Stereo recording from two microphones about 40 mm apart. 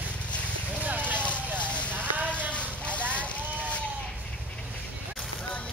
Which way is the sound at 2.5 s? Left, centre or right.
Left.